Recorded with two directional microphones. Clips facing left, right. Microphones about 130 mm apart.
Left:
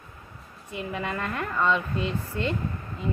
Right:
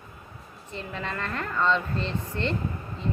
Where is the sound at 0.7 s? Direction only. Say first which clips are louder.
Left 3 dB; 10° left (ahead or behind).